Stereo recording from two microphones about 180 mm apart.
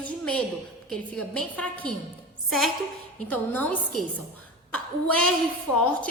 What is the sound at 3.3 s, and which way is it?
A woman's voice, 10° left (ahead or behind).